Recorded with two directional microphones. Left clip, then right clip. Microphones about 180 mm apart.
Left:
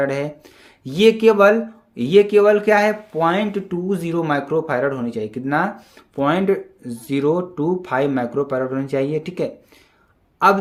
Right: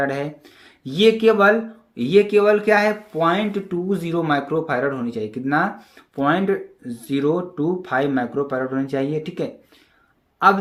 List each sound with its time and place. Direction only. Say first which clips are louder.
0.0 s speech: left 2 dB; 25° left (ahead or behind)